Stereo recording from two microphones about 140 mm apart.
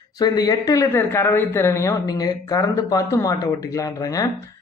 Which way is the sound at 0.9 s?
15° left (ahead or behind).